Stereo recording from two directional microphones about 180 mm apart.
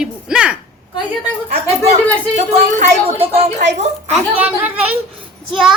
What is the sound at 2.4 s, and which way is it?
Speech, 40° right (ahead or behind).